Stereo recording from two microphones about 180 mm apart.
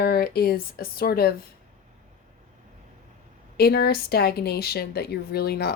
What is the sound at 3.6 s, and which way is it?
Speech, 60° left (ahead or behind).